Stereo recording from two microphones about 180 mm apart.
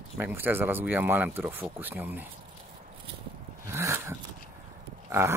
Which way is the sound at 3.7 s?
15° right (ahead or behind).